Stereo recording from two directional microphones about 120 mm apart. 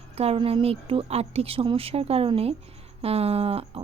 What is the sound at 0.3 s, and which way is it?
Speech, 50° right (ahead or behind).